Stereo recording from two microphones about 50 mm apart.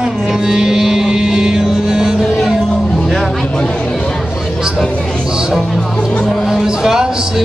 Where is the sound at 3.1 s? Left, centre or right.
Centre.